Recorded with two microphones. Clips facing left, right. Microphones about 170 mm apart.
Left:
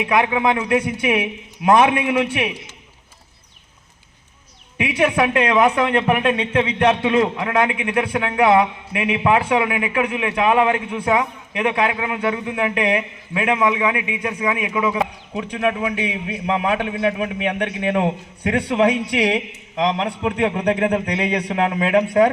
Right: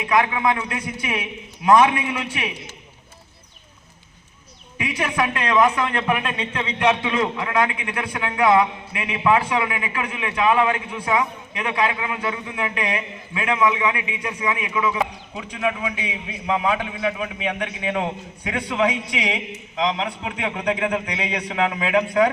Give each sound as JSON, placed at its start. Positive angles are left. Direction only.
{"t": 0.0, "sound": "a man's voice", "side_deg": 60}
{"t": 4.8, "sound": "a man's voice", "side_deg": 60}